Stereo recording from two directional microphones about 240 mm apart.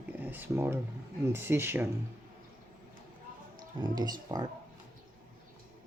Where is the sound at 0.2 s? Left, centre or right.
Centre.